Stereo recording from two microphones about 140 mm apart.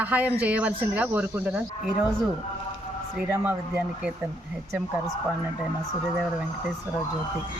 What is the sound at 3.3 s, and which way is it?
Speech, 20° right (ahead or behind).